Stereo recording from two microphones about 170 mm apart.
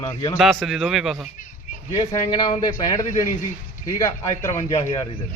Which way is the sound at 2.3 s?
25° left (ahead or behind).